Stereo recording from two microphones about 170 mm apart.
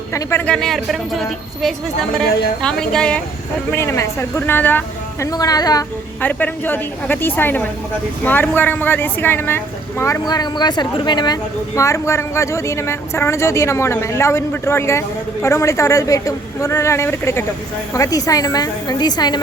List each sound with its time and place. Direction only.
0.1 s speech: 15° left (ahead or behind)
2.6 s speech: 5° left (ahead or behind)
3.7 s speech: 15° left (ahead or behind)
5.2 s a woman's voice: 20° left (ahead or behind)
6.2 s a woman's voice: 10° left (ahead or behind)